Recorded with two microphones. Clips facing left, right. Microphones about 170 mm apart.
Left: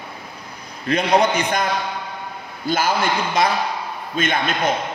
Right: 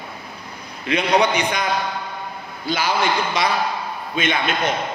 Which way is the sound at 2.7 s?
45° left (ahead or behind).